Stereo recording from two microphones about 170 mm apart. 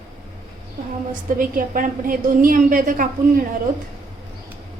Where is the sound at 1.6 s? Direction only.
55° right (ahead or behind).